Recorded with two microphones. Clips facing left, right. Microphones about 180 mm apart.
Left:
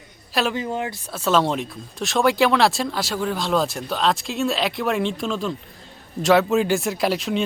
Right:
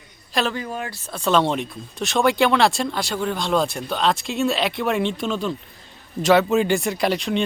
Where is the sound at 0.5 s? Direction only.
20° left (ahead or behind).